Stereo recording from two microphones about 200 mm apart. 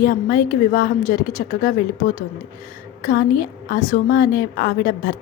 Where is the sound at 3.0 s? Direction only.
45° left (ahead or behind).